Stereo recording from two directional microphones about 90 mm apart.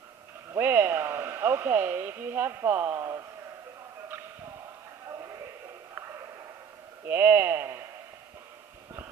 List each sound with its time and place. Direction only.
0.5 s speech: 25° right (ahead or behind)
7.1 s speech: 25° right (ahead or behind)